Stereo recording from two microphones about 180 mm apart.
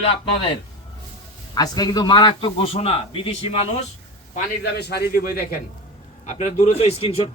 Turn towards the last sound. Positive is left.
turn(degrees=30)  # may be behind; listen again after turning